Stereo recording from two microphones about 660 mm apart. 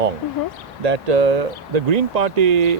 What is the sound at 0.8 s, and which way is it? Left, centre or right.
Speech, right.